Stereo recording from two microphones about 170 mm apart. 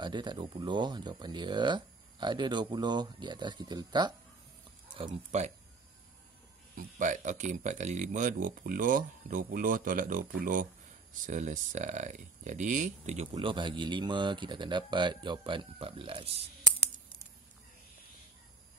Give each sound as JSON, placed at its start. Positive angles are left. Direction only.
{"t": 0.0, "sound": "speech", "side_deg": -25}
{"t": 4.9, "sound": "speech", "side_deg": -35}
{"t": 6.8, "sound": "speech", "side_deg": -50}
{"t": 13.3, "sound": "speech", "side_deg": -30}